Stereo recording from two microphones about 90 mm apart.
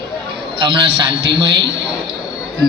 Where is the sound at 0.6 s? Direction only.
65° right (ahead or behind).